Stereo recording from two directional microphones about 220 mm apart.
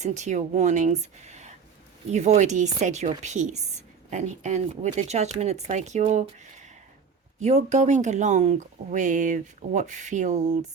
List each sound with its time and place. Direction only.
0.0 s a woman's voice: 30° right (ahead or behind)
7.3 s a woman's voice: 30° right (ahead or behind)